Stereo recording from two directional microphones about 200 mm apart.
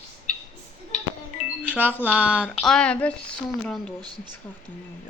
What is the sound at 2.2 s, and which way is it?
A woman's voice, 5° right (ahead or behind).